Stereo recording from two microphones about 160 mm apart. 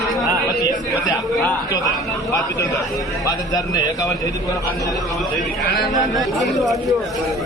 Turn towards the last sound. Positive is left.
turn(degrees=0)  # may be behind; listen again after turning